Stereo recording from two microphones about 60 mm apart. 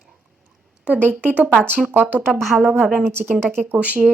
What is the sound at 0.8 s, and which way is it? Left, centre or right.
Speech, right.